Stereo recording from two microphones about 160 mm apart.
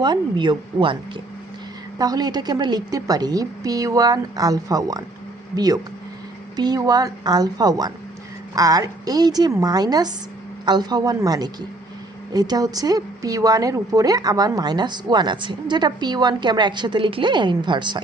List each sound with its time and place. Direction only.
0.0 s speech: 30° right (ahead or behind)